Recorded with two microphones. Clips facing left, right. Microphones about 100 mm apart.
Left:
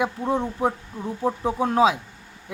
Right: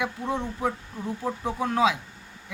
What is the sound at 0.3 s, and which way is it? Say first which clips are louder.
Speech: left 4 dB; 35° left (ahead or behind).